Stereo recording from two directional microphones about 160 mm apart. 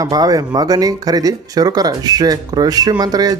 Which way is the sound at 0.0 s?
25° right (ahead or behind).